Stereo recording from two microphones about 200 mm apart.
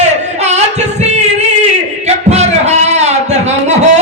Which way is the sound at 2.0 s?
35° right (ahead or behind).